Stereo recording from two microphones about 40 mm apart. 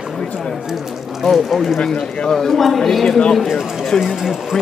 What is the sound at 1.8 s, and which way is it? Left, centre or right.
Speech, left.